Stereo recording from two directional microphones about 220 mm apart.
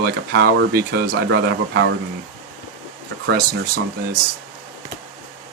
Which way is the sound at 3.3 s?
45° right (ahead or behind).